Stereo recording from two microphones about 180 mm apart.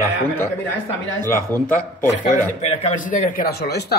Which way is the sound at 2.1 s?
40° left (ahead or behind).